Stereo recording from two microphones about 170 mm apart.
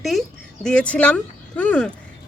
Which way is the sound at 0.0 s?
Centre (ahead or behind).